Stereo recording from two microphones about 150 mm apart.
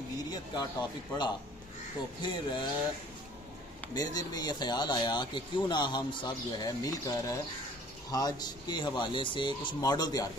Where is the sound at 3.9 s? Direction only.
25° left (ahead or behind).